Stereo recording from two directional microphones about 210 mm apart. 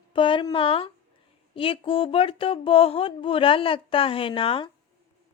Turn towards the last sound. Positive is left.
turn(degrees=25)  # may be behind; listen again after turning